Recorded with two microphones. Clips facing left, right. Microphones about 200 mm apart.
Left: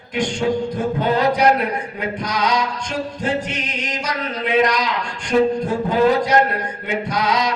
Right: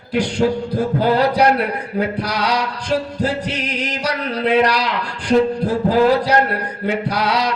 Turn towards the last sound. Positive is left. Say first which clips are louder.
# right 1 dB
turn(degrees=-35)  # may be behind; listen again after turning